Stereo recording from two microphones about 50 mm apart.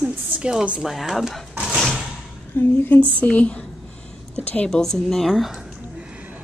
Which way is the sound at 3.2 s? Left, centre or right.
Left.